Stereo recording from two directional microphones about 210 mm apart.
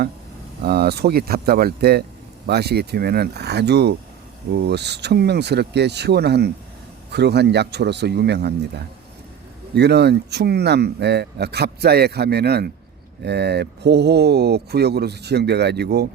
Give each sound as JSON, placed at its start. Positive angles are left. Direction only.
{"t": 0.6, "sound": "speech", "side_deg": -50}